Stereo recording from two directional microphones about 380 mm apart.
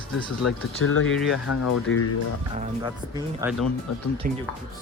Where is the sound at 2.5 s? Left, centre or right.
Centre.